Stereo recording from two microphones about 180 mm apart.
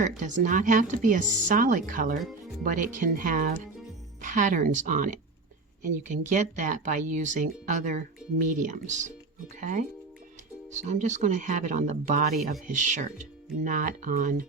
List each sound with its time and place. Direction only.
0.2 s speech: 45° right (ahead or behind)